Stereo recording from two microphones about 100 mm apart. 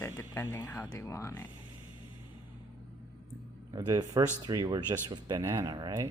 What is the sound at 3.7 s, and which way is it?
Speech, 40° right (ahead or behind).